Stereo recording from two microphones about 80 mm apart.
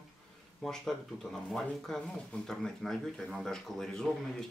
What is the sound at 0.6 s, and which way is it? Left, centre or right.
Speech, centre.